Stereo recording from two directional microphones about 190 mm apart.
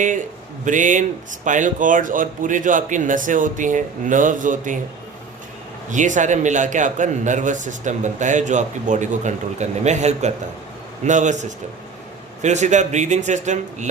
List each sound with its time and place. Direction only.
0.6 s a man's voice: 40° right (ahead or behind)
5.9 s a man's voice: 40° right (ahead or behind)